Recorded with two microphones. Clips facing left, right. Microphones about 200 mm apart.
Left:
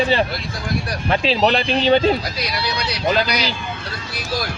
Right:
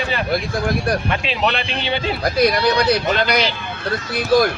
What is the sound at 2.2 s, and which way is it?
Speech, 55° right (ahead or behind).